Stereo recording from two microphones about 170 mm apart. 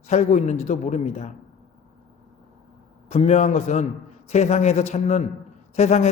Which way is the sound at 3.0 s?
40° left (ahead or behind).